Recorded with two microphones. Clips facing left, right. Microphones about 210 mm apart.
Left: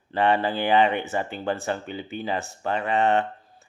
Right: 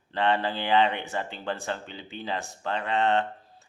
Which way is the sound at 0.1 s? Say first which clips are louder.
Left 4 dB; 10° left (ahead or behind).